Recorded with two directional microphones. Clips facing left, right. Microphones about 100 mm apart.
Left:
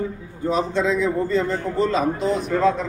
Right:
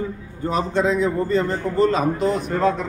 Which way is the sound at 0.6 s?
50° right (ahead or behind).